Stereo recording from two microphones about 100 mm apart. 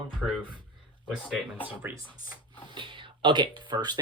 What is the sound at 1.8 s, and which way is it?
Speech, 20° right (ahead or behind).